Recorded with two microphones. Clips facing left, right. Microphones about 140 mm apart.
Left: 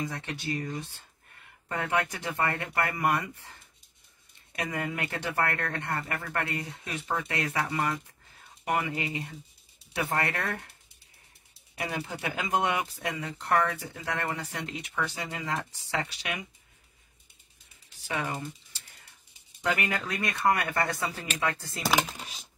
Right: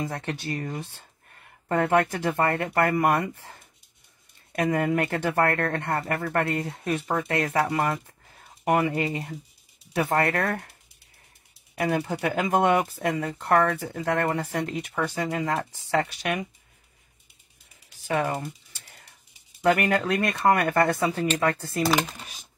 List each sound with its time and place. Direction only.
0.1 s speech: 50° right (ahead or behind)
1.7 s speech: 55° right (ahead or behind)
8.6 s speech: 55° right (ahead or behind)
11.8 s speech: 50° right (ahead or behind)
18.0 s speech: 50° right (ahead or behind)
19.6 s speech: 55° right (ahead or behind)